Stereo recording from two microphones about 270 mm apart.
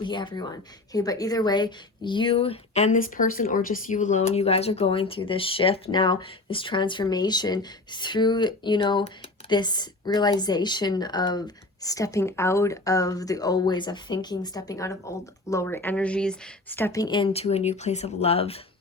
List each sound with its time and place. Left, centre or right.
0.0 s a woman's voice: centre